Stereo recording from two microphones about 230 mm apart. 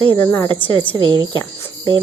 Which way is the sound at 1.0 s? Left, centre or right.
Right.